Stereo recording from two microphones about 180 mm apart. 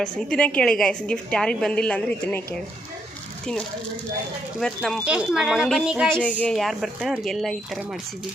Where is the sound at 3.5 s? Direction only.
5° left (ahead or behind).